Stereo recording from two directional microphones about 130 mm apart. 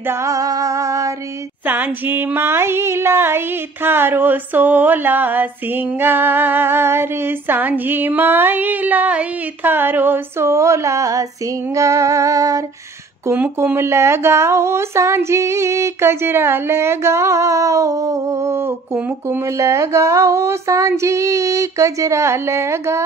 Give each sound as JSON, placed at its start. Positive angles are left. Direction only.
{"t": 0.0, "sound": "music", "side_deg": -20}
{"t": 1.7, "sound": "music", "side_deg": -15}
{"t": 13.2, "sound": "speech", "side_deg": -20}